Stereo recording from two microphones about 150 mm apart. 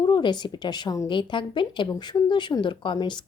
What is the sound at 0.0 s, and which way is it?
A woman's voice, 30° left (ahead or behind).